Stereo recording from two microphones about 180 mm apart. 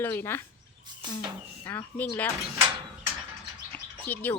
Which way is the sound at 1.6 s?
15° left (ahead or behind).